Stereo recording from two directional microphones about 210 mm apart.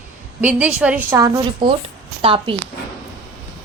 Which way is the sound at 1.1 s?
15° right (ahead or behind).